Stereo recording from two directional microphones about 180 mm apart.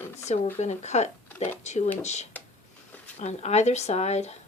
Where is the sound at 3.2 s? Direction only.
40° left (ahead or behind).